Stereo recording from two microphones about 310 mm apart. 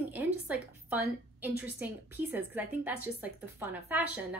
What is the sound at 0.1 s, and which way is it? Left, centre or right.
A woman's voice, centre.